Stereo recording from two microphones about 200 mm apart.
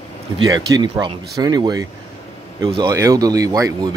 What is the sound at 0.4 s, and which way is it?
Speech, 20° right (ahead or behind).